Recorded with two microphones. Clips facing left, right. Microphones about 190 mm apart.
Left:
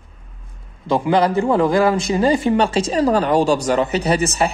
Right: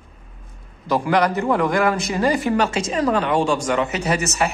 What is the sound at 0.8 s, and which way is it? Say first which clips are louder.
A man's voice: left 2 dB; 25° left (ahead or behind).